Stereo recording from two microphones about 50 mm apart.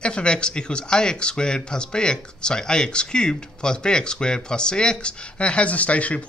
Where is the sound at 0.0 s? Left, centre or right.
Centre.